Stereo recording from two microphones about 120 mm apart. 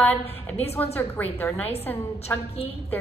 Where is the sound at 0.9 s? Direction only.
15° left (ahead or behind).